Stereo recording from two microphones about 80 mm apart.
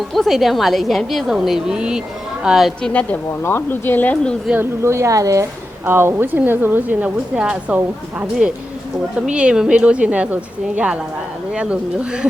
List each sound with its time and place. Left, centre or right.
0.1 s a woman's voice: centre
2.9 s speech: centre
3.4 s speech: left
4.5 s speech: right
5.8 s a woman's voice: right; by 7.8 s centre
9.1 s a woman's voice: centre